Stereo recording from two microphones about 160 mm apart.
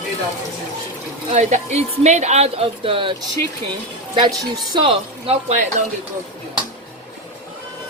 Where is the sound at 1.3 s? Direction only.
45° right (ahead or behind).